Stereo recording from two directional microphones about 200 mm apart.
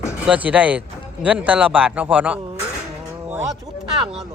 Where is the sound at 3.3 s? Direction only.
10° right (ahead or behind).